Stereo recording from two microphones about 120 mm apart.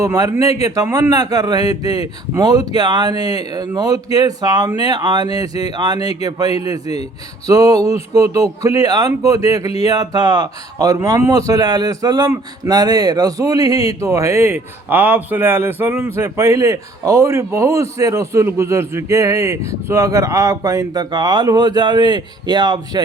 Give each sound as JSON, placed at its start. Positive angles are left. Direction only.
{"t": 0.0, "sound": "speech", "side_deg": -30}